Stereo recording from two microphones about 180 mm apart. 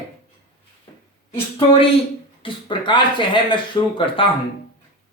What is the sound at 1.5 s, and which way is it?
Speech, 30° left (ahead or behind).